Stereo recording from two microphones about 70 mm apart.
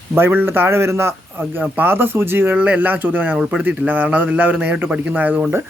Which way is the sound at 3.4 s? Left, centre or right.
Centre.